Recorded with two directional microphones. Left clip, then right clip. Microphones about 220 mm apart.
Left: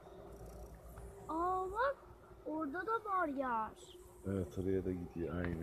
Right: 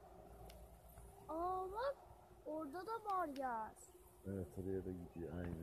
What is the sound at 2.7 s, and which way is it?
Speech, 25° left (ahead or behind).